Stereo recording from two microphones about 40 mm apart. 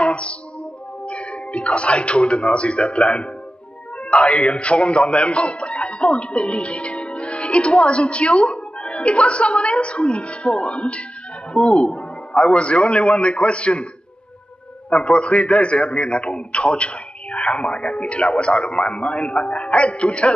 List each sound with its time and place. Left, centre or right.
0.0 s music: left
1.0 s a man's voice: left
14.9 s a man's voice: left